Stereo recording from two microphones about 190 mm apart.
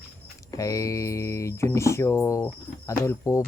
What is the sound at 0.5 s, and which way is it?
Speech, 15° left (ahead or behind).